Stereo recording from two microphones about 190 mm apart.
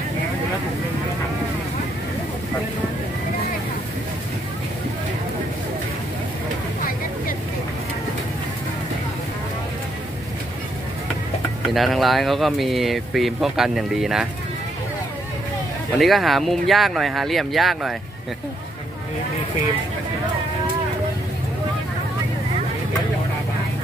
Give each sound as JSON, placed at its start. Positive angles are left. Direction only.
{"t": 11.6, "sound": "speech", "side_deg": 0}
{"t": 16.0, "sound": "speech", "side_deg": 0}